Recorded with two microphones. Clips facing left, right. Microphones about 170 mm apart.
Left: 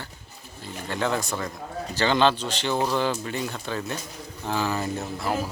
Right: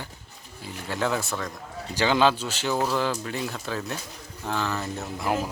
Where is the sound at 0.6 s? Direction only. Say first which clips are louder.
Even; 5° right (ahead or behind); by 4.9 s 10° left (ahead or behind).